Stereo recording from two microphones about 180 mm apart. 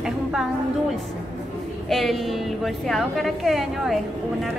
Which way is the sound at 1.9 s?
Centre (ahead or behind).